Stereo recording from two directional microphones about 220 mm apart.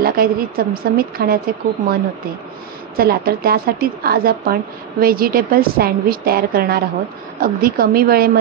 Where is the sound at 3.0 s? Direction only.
45° right (ahead or behind).